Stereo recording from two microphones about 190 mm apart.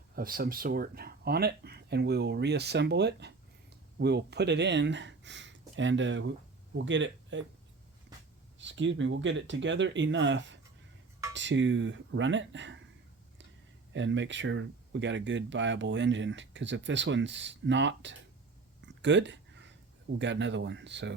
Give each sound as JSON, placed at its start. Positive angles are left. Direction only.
{"t": 0.2, "sound": "speech", "side_deg": -50}
{"t": 8.5, "sound": "speech", "side_deg": -75}
{"t": 13.9, "sound": "speech", "side_deg": -75}
{"t": 19.0, "sound": "a sound", "side_deg": -70}
{"t": 20.1, "sound": "speech", "side_deg": -70}